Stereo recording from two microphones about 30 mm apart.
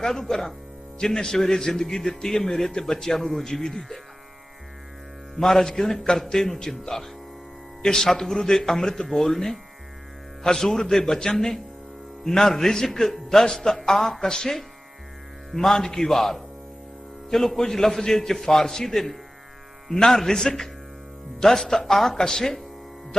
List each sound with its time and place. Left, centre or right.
0.0 s a man's voice: centre
5.4 s a man's voice: centre
5.6 s a man's voice: centre